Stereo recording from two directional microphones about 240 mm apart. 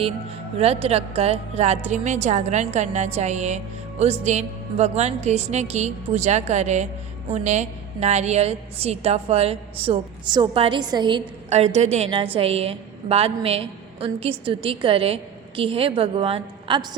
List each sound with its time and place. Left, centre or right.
0.6 s a woman's voice: right